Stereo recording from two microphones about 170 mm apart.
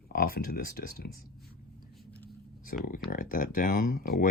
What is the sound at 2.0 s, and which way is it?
Vehicle, 10° left (ahead or behind).